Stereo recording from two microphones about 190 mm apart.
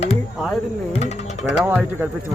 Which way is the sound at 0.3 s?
Centre (ahead or behind).